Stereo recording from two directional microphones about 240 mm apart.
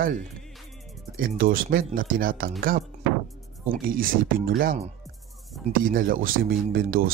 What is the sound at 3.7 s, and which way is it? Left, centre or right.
Speech, right.